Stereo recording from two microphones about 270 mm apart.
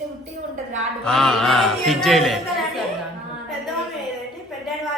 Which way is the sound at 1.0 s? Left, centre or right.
Centre.